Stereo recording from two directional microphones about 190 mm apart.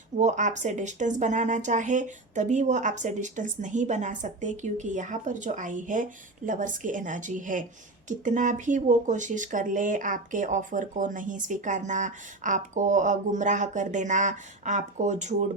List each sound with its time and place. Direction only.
0.2 s speech: 40° right (ahead or behind)